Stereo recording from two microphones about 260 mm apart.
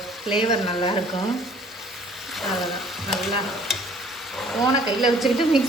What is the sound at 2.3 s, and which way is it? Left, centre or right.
Stir, centre.